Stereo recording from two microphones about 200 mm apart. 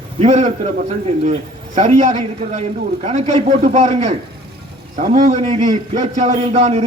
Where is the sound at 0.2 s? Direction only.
35° right (ahead or behind).